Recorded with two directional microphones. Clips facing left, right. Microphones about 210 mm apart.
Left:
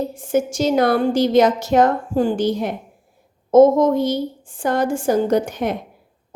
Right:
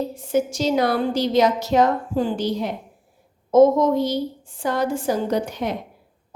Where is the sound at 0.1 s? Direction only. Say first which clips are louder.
Left 2 dB; 50° left (ahead or behind).